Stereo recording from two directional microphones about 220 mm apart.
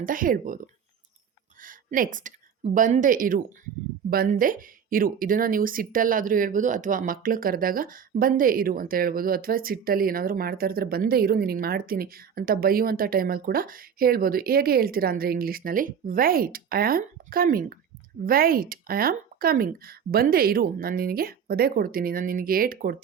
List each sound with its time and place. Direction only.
0.0 s a woman's voice: 40° right (ahead or behind)